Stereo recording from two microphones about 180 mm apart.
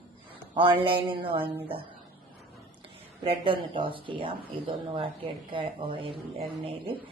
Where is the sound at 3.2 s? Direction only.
30° right (ahead or behind).